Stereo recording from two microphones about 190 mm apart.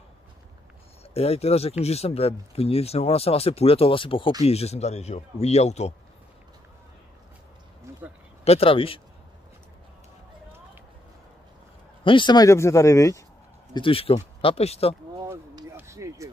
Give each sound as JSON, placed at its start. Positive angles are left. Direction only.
{"t": 1.1, "sound": "speech", "side_deg": 30}
{"t": 8.5, "sound": "speech", "side_deg": 30}
{"t": 12.0, "sound": "speech", "side_deg": 25}
{"t": 13.7, "sound": "speech", "side_deg": 30}
{"t": 15.1, "sound": "a sound", "side_deg": -20}